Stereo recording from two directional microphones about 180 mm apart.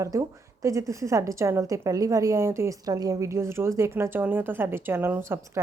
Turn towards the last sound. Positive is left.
turn(degrees=-10)  # may be behind; listen again after turning